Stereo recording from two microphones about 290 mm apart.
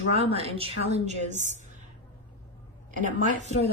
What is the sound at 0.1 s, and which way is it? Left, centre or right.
A woman's voice, right.